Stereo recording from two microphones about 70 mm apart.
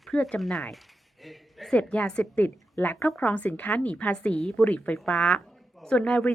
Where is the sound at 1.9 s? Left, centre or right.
Centre.